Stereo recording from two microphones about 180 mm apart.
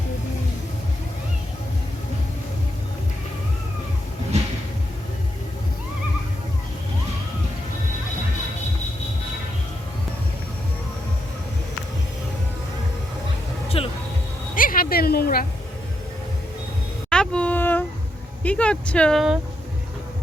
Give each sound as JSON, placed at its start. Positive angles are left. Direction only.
{"t": 13.7, "sound": "music", "side_deg": 30}
{"t": 14.5, "sound": "music", "side_deg": 50}
{"t": 17.1, "sound": "a sound", "side_deg": 5}
{"t": 18.4, "sound": "speech", "side_deg": 5}